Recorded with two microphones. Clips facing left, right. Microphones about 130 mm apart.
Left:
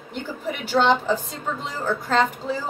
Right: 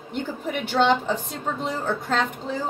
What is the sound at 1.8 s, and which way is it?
Speech, centre (ahead or behind).